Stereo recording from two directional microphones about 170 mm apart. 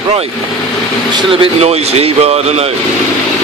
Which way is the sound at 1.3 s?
35° right (ahead or behind).